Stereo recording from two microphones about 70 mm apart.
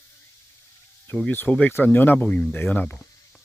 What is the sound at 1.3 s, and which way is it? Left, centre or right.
Speech, left.